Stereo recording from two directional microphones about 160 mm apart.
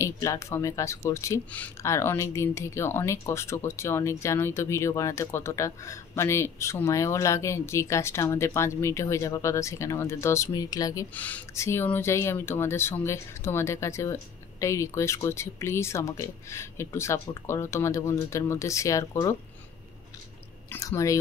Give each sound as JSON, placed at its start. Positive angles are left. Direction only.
{"t": 0.0, "sound": "speech", "side_deg": 20}
{"t": 11.1, "sound": "speech", "side_deg": 10}
{"t": 20.7, "sound": "speech", "side_deg": 20}